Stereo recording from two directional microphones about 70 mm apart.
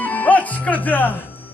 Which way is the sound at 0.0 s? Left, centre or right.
Left.